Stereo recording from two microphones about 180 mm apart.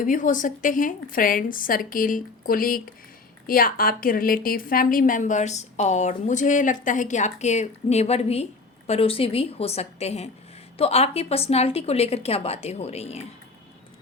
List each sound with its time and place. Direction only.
0.0 s a woman's voice: 45° left (ahead or behind)